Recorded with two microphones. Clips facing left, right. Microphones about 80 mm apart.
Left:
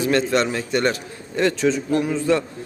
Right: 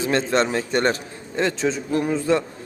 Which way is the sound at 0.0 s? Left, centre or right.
Right.